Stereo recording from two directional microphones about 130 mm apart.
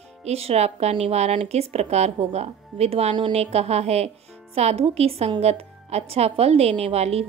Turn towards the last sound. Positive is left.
turn(degrees=-55)  # may be behind; listen again after turning